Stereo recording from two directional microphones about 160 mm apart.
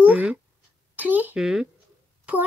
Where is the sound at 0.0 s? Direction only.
10° right (ahead or behind).